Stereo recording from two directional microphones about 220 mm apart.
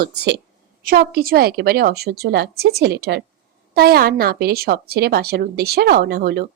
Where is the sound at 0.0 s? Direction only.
50° right (ahead or behind).